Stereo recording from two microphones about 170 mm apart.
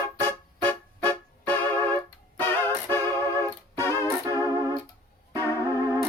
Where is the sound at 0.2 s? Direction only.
10° left (ahead or behind).